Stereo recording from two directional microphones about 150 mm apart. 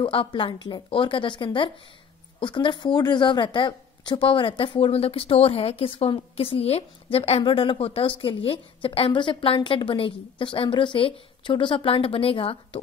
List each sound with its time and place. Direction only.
0.0 s speech: 35° left (ahead or behind)